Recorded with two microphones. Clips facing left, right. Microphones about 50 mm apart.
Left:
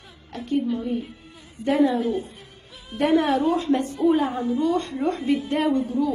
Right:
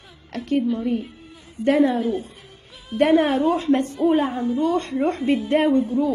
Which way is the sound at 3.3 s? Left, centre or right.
Right.